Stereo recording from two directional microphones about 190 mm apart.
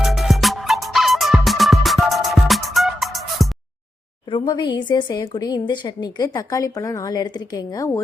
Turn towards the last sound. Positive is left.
turn(degrees=20)  # may be behind; listen again after turning